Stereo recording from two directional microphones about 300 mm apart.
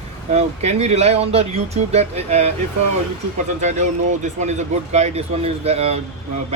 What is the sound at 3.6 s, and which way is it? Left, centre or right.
Speech, right.